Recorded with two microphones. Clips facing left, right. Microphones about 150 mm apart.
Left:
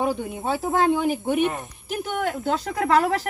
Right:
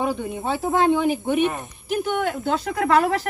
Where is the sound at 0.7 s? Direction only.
20° right (ahead or behind).